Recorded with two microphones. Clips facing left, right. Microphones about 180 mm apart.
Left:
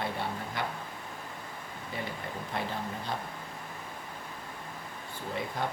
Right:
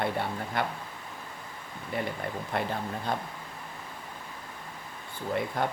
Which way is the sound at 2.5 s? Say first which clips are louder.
Right 4 dB; 60° right (ahead or behind).